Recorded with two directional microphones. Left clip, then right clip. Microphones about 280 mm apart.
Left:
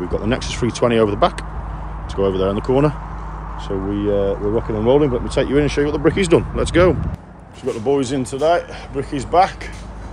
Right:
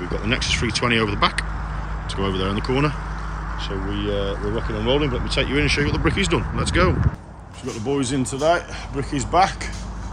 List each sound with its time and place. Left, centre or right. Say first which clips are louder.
0.1 s speech: right 2 dB; centre
7.6 s speech: left 6 dB; centre